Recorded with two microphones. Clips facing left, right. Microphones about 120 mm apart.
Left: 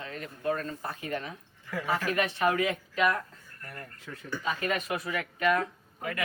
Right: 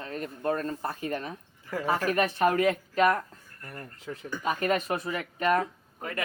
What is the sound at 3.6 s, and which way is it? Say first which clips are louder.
Speech: right 2 dB; 25° right (ahead or behind).